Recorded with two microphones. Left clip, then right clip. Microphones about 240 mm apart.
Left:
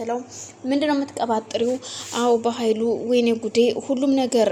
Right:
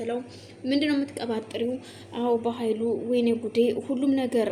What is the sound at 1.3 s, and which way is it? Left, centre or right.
A woman's voice, left.